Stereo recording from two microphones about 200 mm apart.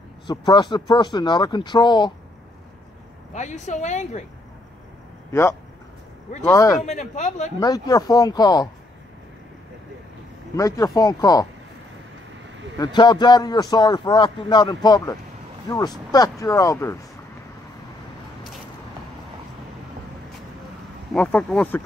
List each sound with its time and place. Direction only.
0.3 s a man's voice: 20° left (ahead or behind)
3.3 s speech: 35° left (ahead or behind)
5.3 s speech: 15° left (ahead or behind)
6.8 s speech: 35° left (ahead or behind)
7.6 s a man's voice: 20° left (ahead or behind)
10.5 s speech: 15° left (ahead or behind)
12.7 s a man's voice: 20° left (ahead or behind)
21.1 s speech: 5° left (ahead or behind)